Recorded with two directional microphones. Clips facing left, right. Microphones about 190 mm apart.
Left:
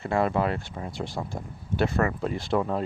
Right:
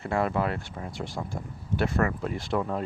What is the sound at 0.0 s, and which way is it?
Speech, 25° left (ahead or behind).